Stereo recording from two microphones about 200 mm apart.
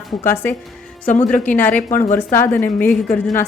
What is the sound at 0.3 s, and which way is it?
Speech, 10° left (ahead or behind).